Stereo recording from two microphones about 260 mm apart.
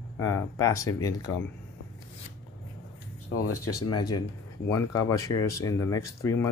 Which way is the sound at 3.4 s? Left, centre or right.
Left.